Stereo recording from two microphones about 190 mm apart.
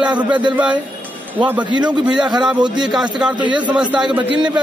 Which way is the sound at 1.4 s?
5° right (ahead or behind).